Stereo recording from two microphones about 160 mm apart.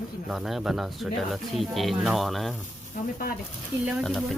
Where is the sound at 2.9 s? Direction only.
60° left (ahead or behind).